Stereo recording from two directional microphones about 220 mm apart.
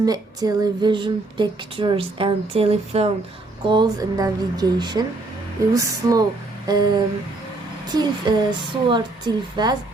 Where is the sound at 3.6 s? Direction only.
20° right (ahead or behind).